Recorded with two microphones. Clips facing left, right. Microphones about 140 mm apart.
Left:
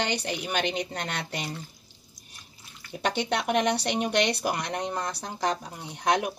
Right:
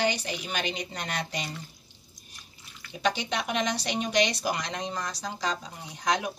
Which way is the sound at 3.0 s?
60° left (ahead or behind).